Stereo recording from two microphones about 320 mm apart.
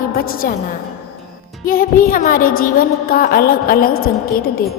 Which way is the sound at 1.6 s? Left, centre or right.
Left.